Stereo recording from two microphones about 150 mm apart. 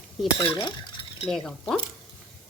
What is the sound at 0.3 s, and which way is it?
Dishes, 30° left (ahead or behind).